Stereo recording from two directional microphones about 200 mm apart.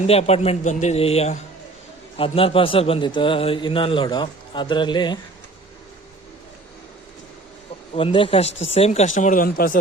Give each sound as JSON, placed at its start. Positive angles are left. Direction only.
{"t": 0.1, "sound": "a man's voice", "side_deg": 30}
{"t": 7.9, "sound": "a man's voice", "side_deg": 25}